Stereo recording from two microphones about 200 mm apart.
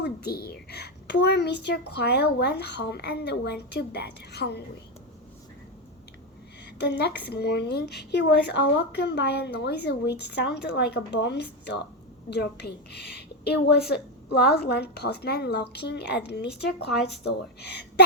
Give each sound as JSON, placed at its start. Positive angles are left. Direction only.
{"t": 0.0, "sound": "a child's voice", "side_deg": 55}
{"t": 6.7, "sound": "a child's voice", "side_deg": 55}